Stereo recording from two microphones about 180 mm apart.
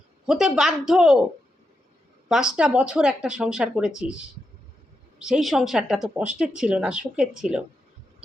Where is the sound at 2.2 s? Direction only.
5° right (ahead or behind).